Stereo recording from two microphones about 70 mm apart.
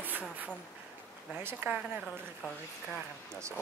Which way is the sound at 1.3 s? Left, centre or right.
Right.